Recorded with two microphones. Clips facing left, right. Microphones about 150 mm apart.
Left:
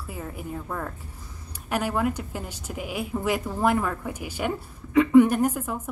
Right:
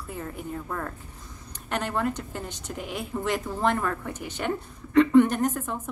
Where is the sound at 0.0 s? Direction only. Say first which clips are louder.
Even; 5° left (ahead or behind).